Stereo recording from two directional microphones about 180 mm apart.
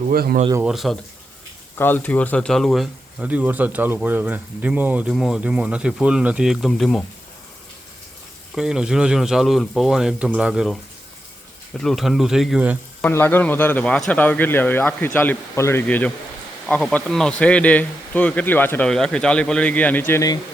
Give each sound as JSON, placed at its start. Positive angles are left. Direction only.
{"t": 0.1, "sound": "speech", "side_deg": -55}
{"t": 0.6, "sound": "speech", "side_deg": 0}
{"t": 1.8, "sound": "speech", "side_deg": 10}
{"t": 8.5, "sound": "speech", "side_deg": -5}
{"t": 11.8, "sound": "speech", "side_deg": 0}
{"t": 13.0, "sound": "speech", "side_deg": 10}